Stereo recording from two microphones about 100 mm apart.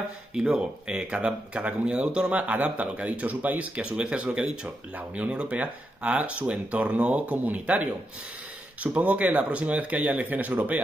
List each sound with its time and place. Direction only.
0.3 s speech: 5° right (ahead or behind)